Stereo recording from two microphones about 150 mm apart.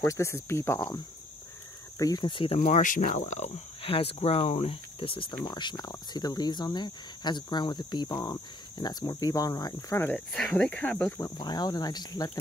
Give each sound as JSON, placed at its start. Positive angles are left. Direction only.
{"t": 0.0, "sound": "speech", "side_deg": 20}
{"t": 2.6, "sound": "speech", "side_deg": 55}
{"t": 10.3, "sound": "speech", "side_deg": 5}
{"t": 11.3, "sound": "speech", "side_deg": 30}